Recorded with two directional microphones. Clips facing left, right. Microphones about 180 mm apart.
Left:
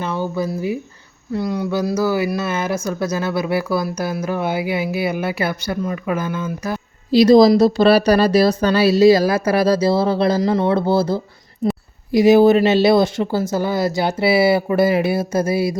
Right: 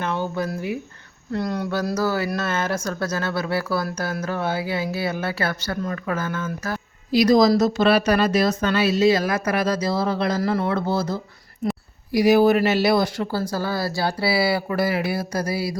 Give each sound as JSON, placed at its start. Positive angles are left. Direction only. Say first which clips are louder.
{"t": 0.1, "sound": "a sound", "louder": "left 3 dB", "side_deg": 10}
{"t": 1.3, "sound": "speech", "louder": "left 4 dB", "side_deg": 5}
{"t": 7.1, "sound": "speech", "louder": "left 6 dB", "side_deg": 30}